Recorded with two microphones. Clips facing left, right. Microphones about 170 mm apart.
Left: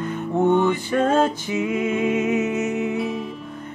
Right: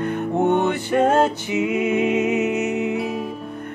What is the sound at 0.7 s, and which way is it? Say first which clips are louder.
Female singing: right 2 dB; 60° right (ahead or behind).